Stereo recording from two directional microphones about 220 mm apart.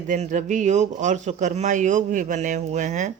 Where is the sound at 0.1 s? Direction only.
35° right (ahead or behind).